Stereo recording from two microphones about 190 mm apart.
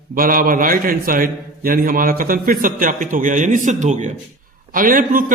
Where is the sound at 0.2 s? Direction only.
50° right (ahead or behind).